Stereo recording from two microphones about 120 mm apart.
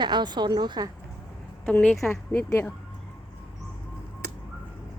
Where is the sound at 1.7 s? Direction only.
10° left (ahead or behind).